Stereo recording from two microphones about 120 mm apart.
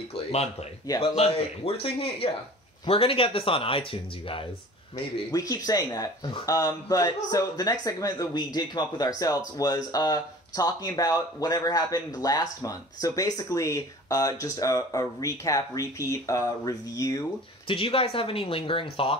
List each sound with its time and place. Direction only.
0.1 s speech: 60° left (ahead or behind)
4.9 s speech: 30° left (ahead or behind)
17.6 s speech: 50° left (ahead or behind)